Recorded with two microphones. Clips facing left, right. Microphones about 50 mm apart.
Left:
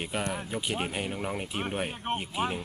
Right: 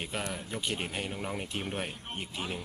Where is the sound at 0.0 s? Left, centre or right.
Centre.